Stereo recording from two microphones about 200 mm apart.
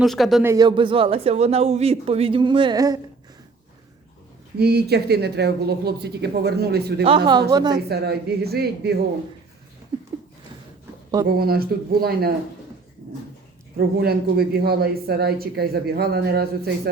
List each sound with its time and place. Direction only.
0.0 s speech: centre (ahead or behind)
0.4 s a man's voice: 20° right (ahead or behind)
4.5 s speech: 55° right (ahead or behind)
7.5 s a man's voice: 20° right (ahead or behind)
7.9 s speech: 55° right (ahead or behind)
11.3 s speech: 50° right (ahead or behind)
13.7 s speech: 50° right (ahead or behind)